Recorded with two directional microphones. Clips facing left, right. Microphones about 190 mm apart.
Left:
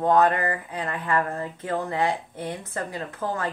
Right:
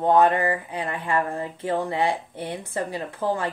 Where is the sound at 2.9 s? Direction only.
30° right (ahead or behind).